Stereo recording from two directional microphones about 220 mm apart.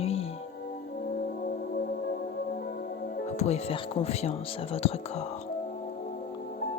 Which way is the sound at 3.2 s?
30° left (ahead or behind).